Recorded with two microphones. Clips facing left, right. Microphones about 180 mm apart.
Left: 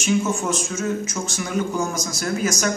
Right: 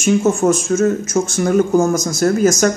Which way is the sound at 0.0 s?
45° right (ahead or behind).